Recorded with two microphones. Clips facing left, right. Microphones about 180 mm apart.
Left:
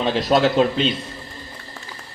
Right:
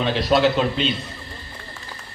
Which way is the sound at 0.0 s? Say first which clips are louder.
Left 1 dB; 45° left (ahead or behind).